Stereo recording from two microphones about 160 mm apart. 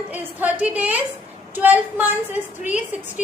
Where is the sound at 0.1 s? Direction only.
10° right (ahead or behind).